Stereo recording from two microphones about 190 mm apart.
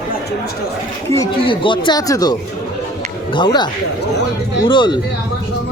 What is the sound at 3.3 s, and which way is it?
Speech, 25° left (ahead or behind).